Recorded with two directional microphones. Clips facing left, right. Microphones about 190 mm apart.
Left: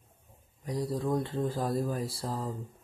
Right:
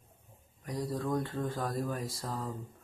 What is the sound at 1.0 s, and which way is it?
Speech, 25° left (ahead or behind).